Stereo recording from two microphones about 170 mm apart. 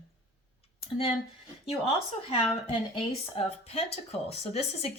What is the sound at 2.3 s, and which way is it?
Speech, 35° left (ahead or behind).